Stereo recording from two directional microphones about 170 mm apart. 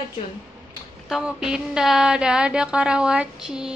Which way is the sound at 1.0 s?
5° right (ahead or behind).